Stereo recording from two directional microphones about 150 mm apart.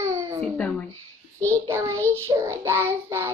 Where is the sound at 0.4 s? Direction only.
10° left (ahead or behind).